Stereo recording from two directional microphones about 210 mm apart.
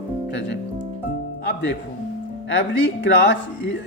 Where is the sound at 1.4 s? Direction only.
55° left (ahead or behind).